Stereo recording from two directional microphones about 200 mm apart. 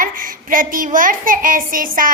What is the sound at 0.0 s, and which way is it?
A child's voice, 45° right (ahead or behind).